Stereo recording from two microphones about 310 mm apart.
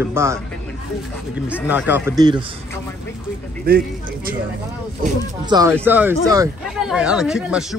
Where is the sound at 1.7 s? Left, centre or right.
Centre.